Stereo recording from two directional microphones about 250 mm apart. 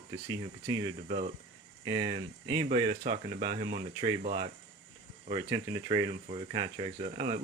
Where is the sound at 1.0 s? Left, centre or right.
Right.